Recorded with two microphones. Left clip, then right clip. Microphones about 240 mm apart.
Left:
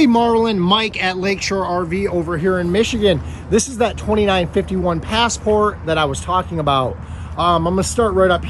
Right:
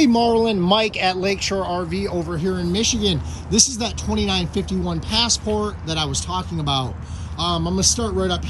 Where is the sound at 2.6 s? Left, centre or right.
Centre.